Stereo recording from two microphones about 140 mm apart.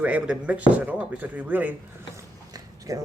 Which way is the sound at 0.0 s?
10° right (ahead or behind).